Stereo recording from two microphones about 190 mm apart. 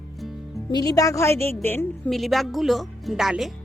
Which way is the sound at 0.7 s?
20° left (ahead or behind).